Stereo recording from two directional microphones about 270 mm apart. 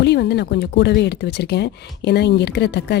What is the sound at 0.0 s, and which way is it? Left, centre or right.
Speech, left.